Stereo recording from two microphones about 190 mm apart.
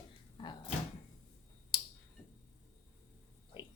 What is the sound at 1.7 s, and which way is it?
Tick-tock, 20° left (ahead or behind).